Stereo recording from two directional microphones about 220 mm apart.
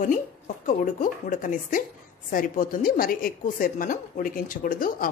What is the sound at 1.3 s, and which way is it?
Speech, 35° left (ahead or behind).